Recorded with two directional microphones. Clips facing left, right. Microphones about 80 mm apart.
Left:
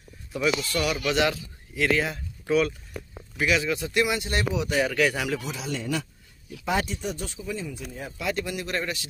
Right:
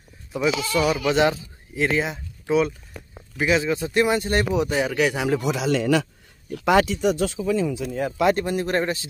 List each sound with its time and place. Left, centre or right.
0.3 s speech: right
4.6 s speech: centre
5.4 s speech: right
6.5 s speech: right
8.4 s speech: right